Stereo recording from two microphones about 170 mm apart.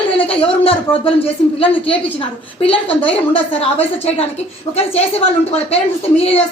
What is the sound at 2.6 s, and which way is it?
A woman's voice, 35° left (ahead or behind).